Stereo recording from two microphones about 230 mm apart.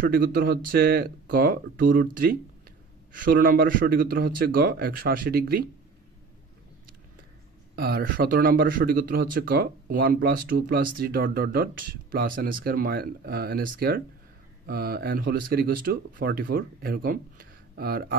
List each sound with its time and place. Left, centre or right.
0.0 s speech: right
7.7 s speech: right